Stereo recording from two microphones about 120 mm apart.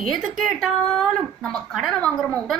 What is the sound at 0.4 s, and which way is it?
A woman's voice, centre (ahead or behind).